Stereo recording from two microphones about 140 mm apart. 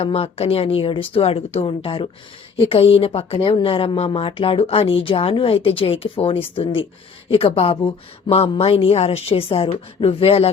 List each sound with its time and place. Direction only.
0.0 s a woman's voice: 45° left (ahead or behind)